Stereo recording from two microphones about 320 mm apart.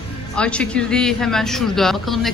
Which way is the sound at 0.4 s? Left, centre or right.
Centre.